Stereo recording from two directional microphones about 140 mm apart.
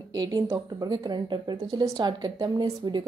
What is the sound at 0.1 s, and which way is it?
A woman's voice, 25° right (ahead or behind).